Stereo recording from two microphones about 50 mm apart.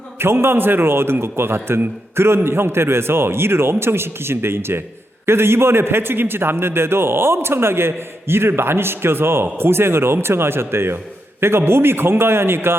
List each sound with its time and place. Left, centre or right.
0.2 s a man's voice: right